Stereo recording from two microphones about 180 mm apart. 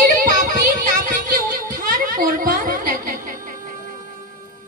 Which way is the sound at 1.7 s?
50° right (ahead or behind).